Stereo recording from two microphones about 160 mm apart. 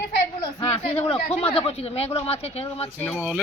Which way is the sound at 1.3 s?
35° left (ahead or behind).